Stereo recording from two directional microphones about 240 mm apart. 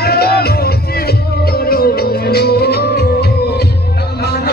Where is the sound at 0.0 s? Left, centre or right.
Left.